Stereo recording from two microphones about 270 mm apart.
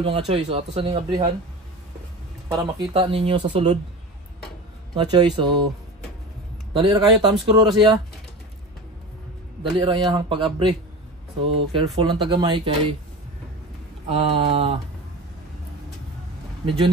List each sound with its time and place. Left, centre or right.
0.0 s speech: right
2.5 s speech: centre
4.9 s speech: centre
6.7 s speech: centre
9.6 s speech: centre
14.0 s speech: right